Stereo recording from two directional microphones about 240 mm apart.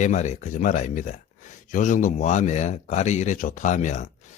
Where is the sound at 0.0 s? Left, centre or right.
Left.